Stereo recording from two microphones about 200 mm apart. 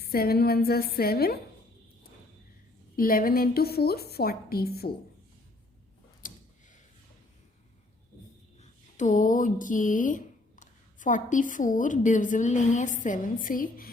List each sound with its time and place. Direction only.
0.0 s a woman's voice: 50° left (ahead or behind)
2.9 s a woman's voice: 45° left (ahead or behind)
6.2 s a sound: 40° left (ahead or behind)
9.0 s speech: 40° left (ahead or behind)